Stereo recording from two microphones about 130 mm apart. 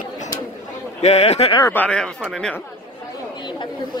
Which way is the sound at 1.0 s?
55° left (ahead or behind).